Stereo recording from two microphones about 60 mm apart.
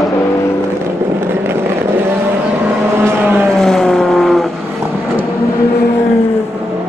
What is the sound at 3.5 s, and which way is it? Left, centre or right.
Vehicle, centre.